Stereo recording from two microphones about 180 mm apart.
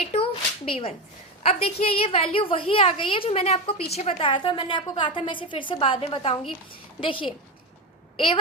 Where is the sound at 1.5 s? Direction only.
35° left (ahead or behind).